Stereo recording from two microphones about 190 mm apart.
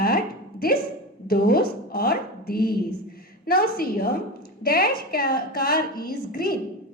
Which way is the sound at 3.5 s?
50° left (ahead or behind).